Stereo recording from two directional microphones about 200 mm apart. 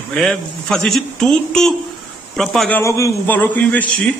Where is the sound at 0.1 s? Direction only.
5° left (ahead or behind).